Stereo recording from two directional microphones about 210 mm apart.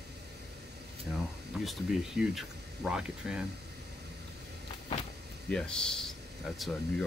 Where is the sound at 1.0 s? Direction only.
Centre (ahead or behind).